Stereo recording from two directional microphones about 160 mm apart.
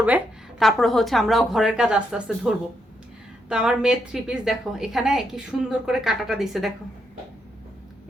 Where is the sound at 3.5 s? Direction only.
5° right (ahead or behind).